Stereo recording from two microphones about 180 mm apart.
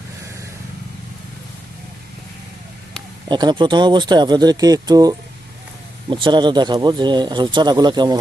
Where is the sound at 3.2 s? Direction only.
25° right (ahead or behind).